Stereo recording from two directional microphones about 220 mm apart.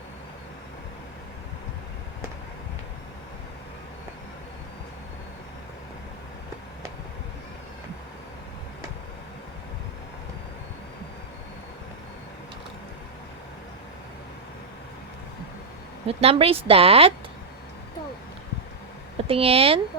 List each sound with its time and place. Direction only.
16.0 s speech: 25° right (ahead or behind)
19.3 s speech: 25° right (ahead or behind)